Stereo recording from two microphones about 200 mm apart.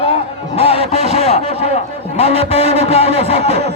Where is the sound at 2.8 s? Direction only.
30° left (ahead or behind).